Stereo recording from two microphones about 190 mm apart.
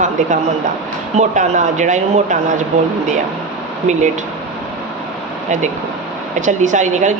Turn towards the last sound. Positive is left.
turn(degrees=-40)  # may be behind; listen again after turning